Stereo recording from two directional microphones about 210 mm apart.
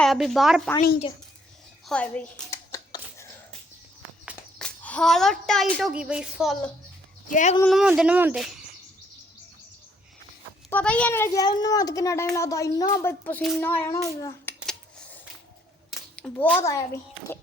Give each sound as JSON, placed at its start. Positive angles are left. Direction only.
{"t": 0.0, "sound": "speech", "side_deg": 0}
{"t": 1.9, "sound": "a sound", "side_deg": 5}
{"t": 4.3, "sound": "a woman's voice", "side_deg": 5}
{"t": 7.3, "sound": "speech", "side_deg": 35}
{"t": 7.6, "sound": "speech", "side_deg": 0}
{"t": 10.7, "sound": "a child's voice", "side_deg": 5}
{"t": 15.9, "sound": "a sound", "side_deg": 0}
{"t": 16.6, "sound": "speech", "side_deg": 15}